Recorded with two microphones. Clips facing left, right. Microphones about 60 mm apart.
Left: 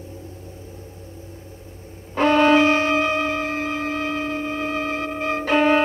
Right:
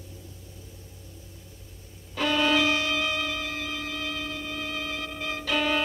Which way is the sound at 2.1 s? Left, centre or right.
Left.